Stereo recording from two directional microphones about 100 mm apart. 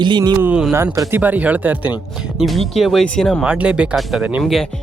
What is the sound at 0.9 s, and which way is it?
Speech, 30° right (ahead or behind).